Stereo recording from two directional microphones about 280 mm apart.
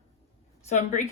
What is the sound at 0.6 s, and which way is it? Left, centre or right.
Speech, left.